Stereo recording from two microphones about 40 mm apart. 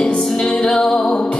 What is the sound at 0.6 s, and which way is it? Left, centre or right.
Music, centre.